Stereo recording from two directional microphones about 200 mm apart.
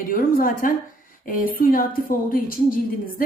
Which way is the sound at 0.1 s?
45° left (ahead or behind).